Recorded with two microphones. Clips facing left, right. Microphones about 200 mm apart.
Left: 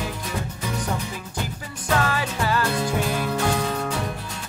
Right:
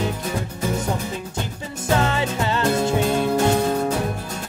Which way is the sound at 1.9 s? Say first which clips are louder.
Right 3 dB; 25° right (ahead or behind).